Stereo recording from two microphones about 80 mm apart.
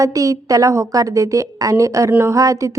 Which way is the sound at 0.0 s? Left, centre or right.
Right.